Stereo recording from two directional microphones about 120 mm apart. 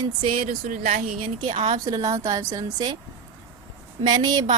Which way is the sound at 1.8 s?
30° right (ahead or behind).